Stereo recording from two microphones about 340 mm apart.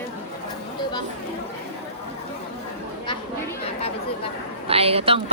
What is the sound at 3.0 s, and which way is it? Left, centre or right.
Chatter, centre.